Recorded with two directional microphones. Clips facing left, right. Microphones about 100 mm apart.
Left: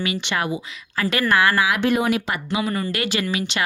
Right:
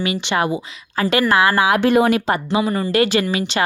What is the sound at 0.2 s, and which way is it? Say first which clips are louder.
Speech: right 5 dB; 25° right (ahead or behind).